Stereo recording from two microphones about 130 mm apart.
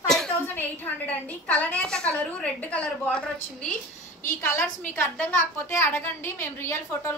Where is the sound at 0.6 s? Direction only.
15° left (ahead or behind).